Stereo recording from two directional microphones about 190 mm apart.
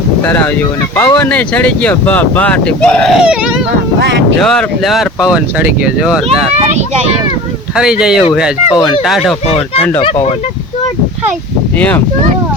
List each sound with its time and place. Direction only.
0.9 s speech: 15° left (ahead or behind)
4.0 s speech: 65° right (ahead or behind)
4.4 s speech: centre (ahead or behind)
6.7 s speech: 35° right (ahead or behind)
7.8 s speech: 5° right (ahead or behind)
10.0 s speech: 30° left (ahead or behind)